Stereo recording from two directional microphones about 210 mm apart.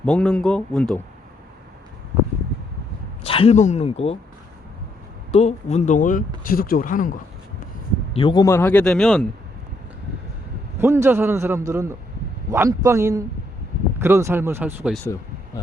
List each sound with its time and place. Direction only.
0.0 s speech: 5° left (ahead or behind)
3.2 s speech: 25° left (ahead or behind)
5.3 s speech: 30° left (ahead or behind)
8.1 s a man's voice: 20° left (ahead or behind); by 9.2 s centre (ahead or behind)
10.8 s a man's voice: 10° right (ahead or behind)
15.0 s a sound: 15° left (ahead or behind)